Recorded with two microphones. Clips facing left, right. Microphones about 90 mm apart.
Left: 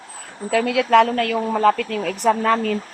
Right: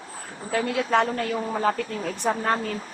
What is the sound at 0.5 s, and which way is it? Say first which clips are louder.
A woman's voice: left 7 dB; 90° left.